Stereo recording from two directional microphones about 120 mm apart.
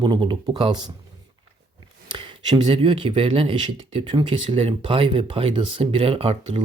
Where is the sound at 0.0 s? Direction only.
40° right (ahead or behind).